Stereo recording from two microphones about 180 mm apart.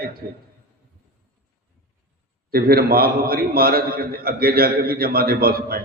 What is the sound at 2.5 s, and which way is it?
A man's voice, 55° right (ahead or behind).